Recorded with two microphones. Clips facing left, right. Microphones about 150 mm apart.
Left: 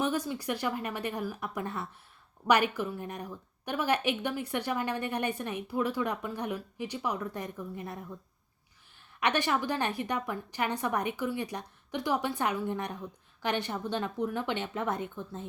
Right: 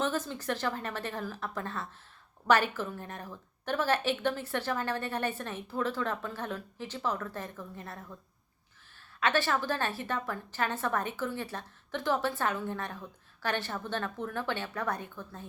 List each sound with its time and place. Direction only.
0.0 s a woman's voice: 15° left (ahead or behind)
9.2 s a woman's voice: 15° left (ahead or behind)